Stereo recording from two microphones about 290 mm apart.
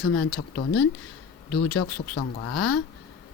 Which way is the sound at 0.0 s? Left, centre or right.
Left.